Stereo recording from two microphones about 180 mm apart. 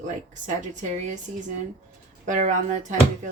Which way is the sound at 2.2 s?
45° right (ahead or behind).